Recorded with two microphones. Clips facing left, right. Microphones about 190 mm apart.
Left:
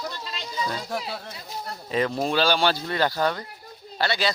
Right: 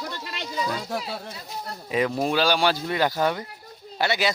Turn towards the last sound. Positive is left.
turn(degrees=-15)  # may be behind; listen again after turning